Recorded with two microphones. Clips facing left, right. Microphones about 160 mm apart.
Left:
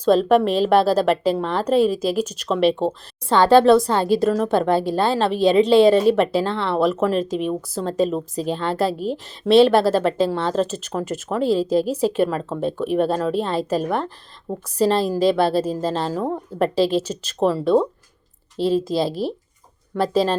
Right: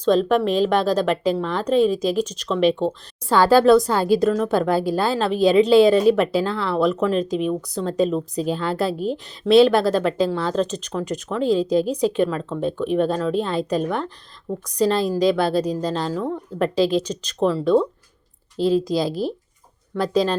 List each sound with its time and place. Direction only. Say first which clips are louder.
0.6 s a woman's voice: left 2 dB; 5° left (ahead or behind)
2.6 s a woman's voice: even; 35° left (ahead or behind)
3.2 s a woman's voice: left 1 dB; centre (ahead or behind)
16.2 s a woman's voice: left 1 dB; 35° left (ahead or behind)
16.7 s a woman's voice: right 2 dB; 5° left (ahead or behind)
18.5 s a woman's voice: even; centre (ahead or behind)